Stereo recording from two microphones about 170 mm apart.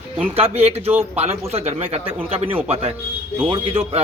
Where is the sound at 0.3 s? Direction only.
35° right (ahead or behind).